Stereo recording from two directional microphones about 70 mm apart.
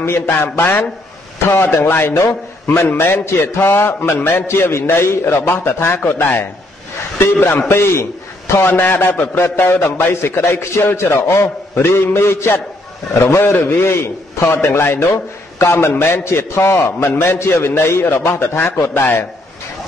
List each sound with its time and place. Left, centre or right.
0.0 s a man's voice: left
2.1 s a man's voice: left
2.7 s a man's voice: left
8.6 s a man's voice: left